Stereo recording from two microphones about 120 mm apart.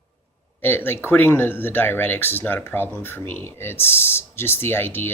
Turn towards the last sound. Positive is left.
turn(degrees=20)  # may be behind; listen again after turning